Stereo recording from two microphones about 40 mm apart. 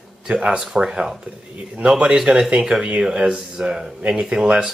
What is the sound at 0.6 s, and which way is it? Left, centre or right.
Speech, right.